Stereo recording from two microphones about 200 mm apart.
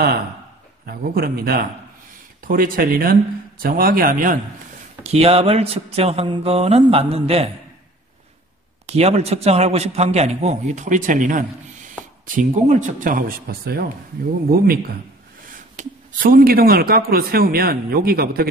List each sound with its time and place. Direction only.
0.8 s a man's voice: 50° right (ahead or behind)
5.0 s mantra: 30° right (ahead or behind)
8.8 s a man's voice: 30° right (ahead or behind); by 14.8 s 50° right (ahead or behind)
15.7 s a man's voice: 40° right (ahead or behind)